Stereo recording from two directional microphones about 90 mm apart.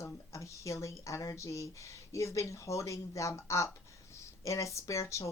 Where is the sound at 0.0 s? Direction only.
35° left (ahead or behind).